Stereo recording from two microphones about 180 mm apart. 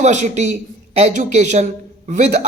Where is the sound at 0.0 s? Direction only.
40° right (ahead or behind).